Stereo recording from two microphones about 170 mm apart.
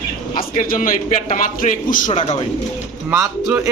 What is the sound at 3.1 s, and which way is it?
Speech, 15° right (ahead or behind).